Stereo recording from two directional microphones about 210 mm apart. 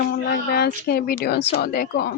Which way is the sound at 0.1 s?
50° left (ahead or behind).